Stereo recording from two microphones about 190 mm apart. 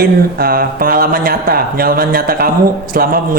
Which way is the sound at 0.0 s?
50° right (ahead or behind).